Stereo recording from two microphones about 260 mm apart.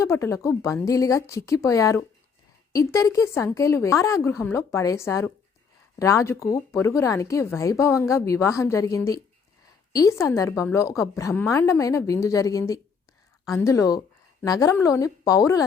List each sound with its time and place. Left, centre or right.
0.0 s speech: centre